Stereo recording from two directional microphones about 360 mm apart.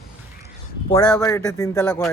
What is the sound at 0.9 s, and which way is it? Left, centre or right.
Speech, centre.